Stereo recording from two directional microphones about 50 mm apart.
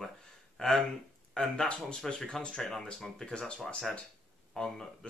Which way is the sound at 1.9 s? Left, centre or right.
Centre.